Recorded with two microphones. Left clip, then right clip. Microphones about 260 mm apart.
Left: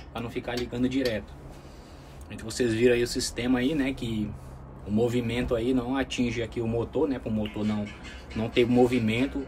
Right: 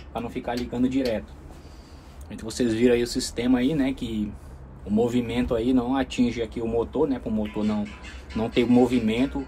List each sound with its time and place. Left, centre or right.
0.1 s speech: centre
2.2 s speech: centre